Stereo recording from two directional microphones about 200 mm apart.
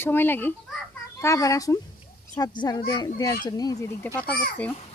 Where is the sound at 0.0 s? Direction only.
10° left (ahead or behind).